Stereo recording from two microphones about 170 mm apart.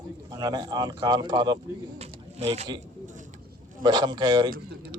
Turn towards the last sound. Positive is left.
turn(degrees=-25)  # may be behind; listen again after turning